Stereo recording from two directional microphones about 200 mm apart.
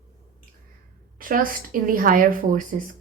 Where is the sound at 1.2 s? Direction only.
45° right (ahead or behind).